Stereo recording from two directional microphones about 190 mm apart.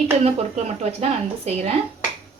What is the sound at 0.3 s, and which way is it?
Speech, 35° right (ahead or behind).